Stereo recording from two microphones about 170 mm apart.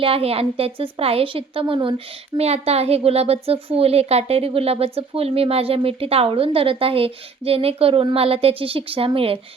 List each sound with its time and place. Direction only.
0.0 s a woman's voice: 35° right (ahead or behind)